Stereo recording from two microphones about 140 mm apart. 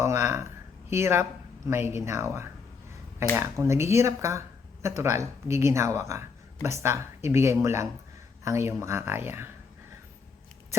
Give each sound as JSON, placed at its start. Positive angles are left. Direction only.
{"t": 0.0, "sound": "speech", "side_deg": -20}